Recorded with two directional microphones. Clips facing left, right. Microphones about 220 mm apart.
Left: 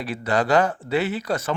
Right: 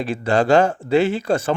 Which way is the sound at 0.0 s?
30° right (ahead or behind).